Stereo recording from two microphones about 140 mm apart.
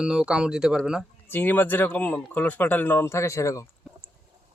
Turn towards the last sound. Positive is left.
turn(degrees=20)  # may be behind; listen again after turning